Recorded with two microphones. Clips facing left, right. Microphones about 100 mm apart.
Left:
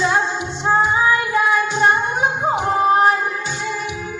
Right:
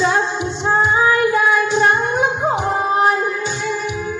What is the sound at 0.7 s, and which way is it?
Music, centre (ahead or behind).